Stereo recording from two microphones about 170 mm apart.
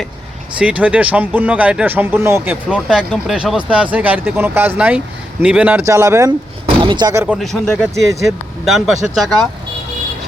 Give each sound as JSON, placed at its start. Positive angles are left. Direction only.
{"t": 0.6, "sound": "speech", "side_deg": -10}
{"t": 7.1, "sound": "speech", "side_deg": -15}
{"t": 7.3, "sound": "speech", "side_deg": 0}